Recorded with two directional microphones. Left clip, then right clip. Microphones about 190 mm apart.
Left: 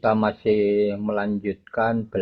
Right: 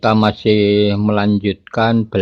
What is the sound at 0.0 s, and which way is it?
Speech, 35° right (ahead or behind).